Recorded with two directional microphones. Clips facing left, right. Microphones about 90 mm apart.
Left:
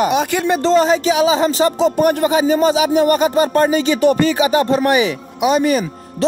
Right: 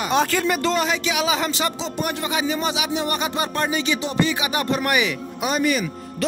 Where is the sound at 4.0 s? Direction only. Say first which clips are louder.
Left 9 dB; 55° left (ahead or behind).